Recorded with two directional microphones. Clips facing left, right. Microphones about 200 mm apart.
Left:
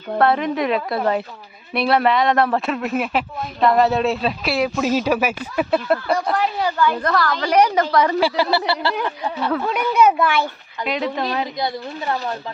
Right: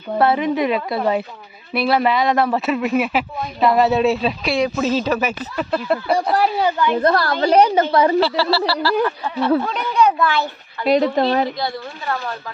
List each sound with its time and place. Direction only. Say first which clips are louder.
0.2 s speech: right 1 dB; 5° right (ahead or behind)
6.3 s speech: right 3 dB; 35° right (ahead or behind)
6.7 s a woman's voice: right 3 dB; 20° right (ahead or behind)
8.2 s speech: right 1 dB; 20° left (ahead or behind)
9.6 s speech: left 1 dB; 5° left (ahead or behind)
10.8 s speech: right 7 dB; 40° right (ahead or behind)
11.5 s speech: left 1 dB; 20° left (ahead or behind)